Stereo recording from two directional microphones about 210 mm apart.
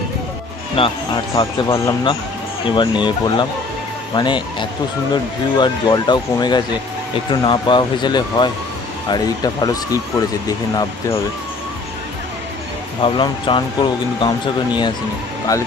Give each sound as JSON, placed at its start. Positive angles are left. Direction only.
{"t": 0.7, "sound": "speech", "side_deg": 25}
{"t": 13.0, "sound": "speech", "side_deg": 25}